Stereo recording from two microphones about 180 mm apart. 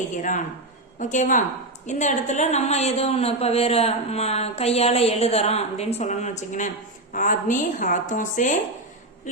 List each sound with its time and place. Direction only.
0.2 s a woman's voice: 45° left (ahead or behind)